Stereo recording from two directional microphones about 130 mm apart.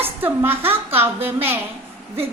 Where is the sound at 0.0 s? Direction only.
15° right (ahead or behind).